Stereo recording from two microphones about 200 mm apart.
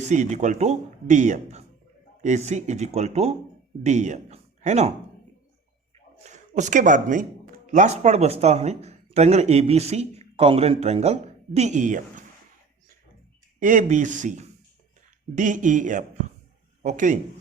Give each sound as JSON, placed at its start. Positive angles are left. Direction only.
{"t": 0.0, "sound": "a man's voice", "side_deg": -35}
{"t": 6.2, "sound": "speech", "side_deg": -35}
{"t": 13.6, "sound": "speech", "side_deg": -40}